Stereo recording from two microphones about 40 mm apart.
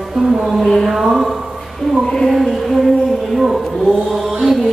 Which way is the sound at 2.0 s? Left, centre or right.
Centre.